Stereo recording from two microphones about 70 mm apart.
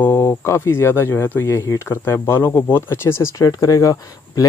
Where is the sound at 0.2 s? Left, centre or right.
Left.